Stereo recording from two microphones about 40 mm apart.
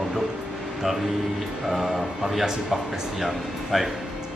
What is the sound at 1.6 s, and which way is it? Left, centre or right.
Speech, centre.